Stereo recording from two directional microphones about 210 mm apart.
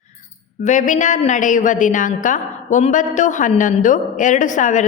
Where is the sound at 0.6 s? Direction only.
35° left (ahead or behind).